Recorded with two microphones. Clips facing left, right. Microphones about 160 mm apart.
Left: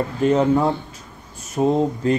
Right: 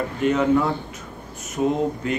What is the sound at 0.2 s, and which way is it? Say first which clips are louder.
Speech: left 2 dB; 35° left (ahead or behind).